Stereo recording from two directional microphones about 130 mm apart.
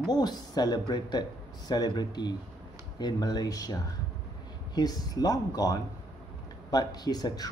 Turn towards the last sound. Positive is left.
turn(degrees=30)  # may be behind; listen again after turning